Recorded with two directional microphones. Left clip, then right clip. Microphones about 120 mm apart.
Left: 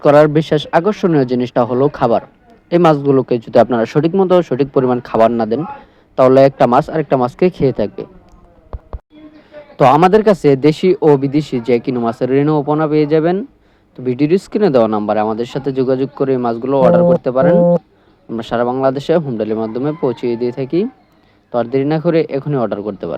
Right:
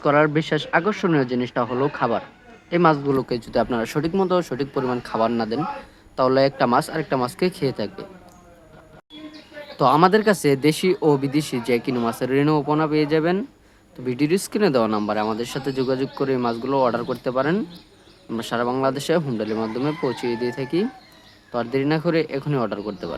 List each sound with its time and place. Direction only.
0.0 s speech: 40° left (ahead or behind)
1.2 s a man's voice: 55° left (ahead or behind)
9.7 s speech: 35° left (ahead or behind)